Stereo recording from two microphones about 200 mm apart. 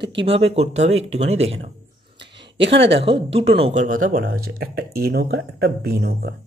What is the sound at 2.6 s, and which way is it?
Speech, 65° right (ahead or behind).